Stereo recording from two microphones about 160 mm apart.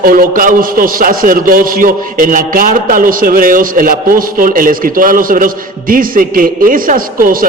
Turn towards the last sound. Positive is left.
turn(degrees=-60)  # may be behind; listen again after turning